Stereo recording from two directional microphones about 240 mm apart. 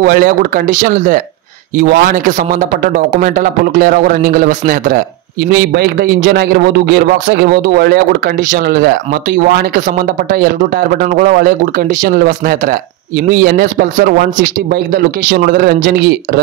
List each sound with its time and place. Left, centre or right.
0.0 s a man's voice: right